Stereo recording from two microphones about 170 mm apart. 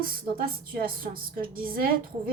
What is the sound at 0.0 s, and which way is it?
A woman's voice, 60° right (ahead or behind).